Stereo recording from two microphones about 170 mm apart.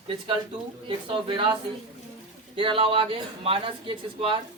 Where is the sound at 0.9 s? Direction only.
30° right (ahead or behind).